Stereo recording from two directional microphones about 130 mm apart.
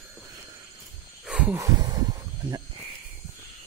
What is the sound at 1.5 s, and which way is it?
Snake, 25° right (ahead or behind).